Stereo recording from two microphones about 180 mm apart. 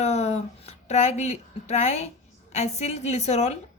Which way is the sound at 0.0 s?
35° left (ahead or behind).